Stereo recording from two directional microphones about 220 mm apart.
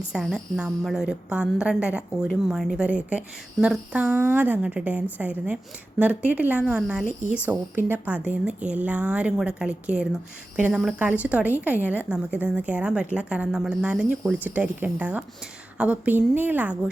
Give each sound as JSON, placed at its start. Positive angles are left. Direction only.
{"t": 0.1, "sound": "a woman's voice", "side_deg": 0}